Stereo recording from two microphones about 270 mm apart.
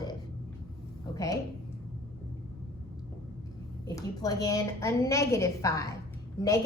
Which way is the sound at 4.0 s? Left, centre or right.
Centre.